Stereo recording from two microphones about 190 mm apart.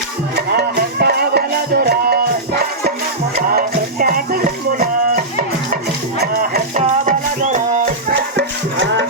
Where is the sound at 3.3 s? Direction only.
45° right (ahead or behind).